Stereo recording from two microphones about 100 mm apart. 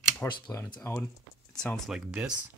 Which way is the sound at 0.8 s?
20° left (ahead or behind).